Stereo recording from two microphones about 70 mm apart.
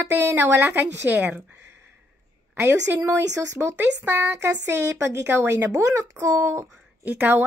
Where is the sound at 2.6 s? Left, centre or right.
Right.